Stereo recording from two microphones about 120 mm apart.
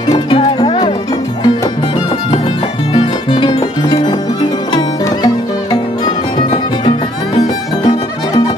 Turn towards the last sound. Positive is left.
turn(degrees=35)  # may be behind; listen again after turning